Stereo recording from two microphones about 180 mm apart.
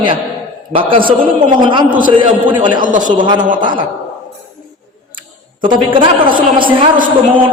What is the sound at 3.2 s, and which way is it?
Speech, 25° right (ahead or behind).